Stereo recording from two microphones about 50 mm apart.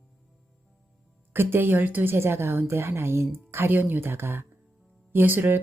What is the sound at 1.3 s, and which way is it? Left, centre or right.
A woman's voice, right.